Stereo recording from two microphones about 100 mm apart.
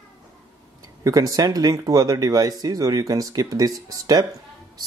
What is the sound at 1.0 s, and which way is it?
Speech, 35° right (ahead or behind).